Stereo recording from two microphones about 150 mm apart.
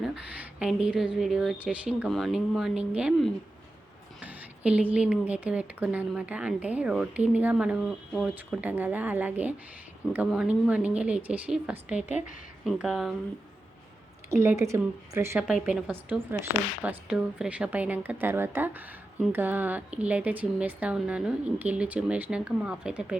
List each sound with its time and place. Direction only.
0.0 s a woman's voice: 5° right (ahead or behind)
2.0 s a woman's voice: centre (ahead or behind)
8.6 s speech: 10° right (ahead or behind)
12.0 s a woman's voice: 50° left (ahead or behind)
12.6 s a woman's voice: centre (ahead or behind)
14.3 s a woman's voice: 15° right (ahead or behind)
15.4 s speech: 5° right (ahead or behind)